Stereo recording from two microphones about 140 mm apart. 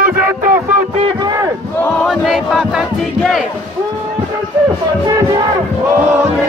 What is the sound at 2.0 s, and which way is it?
Battle cry, 5° right (ahead or behind).